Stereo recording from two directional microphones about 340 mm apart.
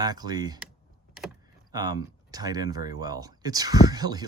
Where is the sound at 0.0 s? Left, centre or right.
Centre.